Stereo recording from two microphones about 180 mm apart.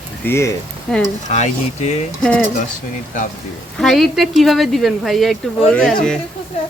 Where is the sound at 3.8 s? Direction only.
Centre (ahead or behind).